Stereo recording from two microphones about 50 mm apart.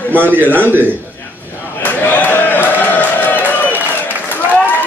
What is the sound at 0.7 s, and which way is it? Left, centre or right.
Speech, right.